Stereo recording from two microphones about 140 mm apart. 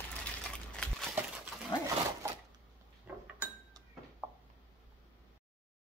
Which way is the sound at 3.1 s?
10° right (ahead or behind).